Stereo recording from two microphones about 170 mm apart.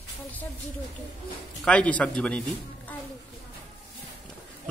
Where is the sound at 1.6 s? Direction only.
10° left (ahead or behind).